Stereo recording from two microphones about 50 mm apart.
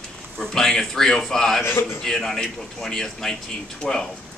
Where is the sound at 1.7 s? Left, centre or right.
Left.